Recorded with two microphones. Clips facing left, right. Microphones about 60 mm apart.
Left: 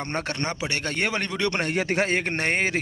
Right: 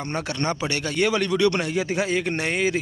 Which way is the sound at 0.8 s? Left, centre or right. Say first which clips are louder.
Right 6 dB; left.